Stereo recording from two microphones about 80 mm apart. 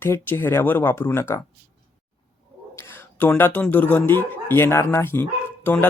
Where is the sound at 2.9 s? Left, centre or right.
Left.